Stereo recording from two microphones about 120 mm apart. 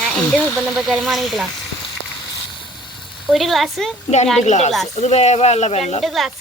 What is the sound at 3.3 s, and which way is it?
Speech, centre (ahead or behind).